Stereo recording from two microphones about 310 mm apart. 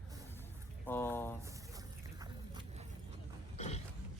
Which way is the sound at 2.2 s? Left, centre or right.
Centre.